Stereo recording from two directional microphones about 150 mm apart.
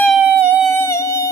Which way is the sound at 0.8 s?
20° left (ahead or behind).